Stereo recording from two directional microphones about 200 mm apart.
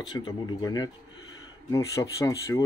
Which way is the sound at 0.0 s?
20° left (ahead or behind).